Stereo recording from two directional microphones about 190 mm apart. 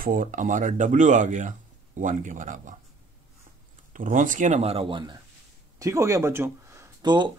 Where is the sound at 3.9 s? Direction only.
45° right (ahead or behind).